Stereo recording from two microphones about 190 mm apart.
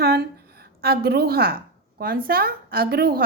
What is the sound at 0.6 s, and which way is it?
A woman's voice, 55° right (ahead or behind).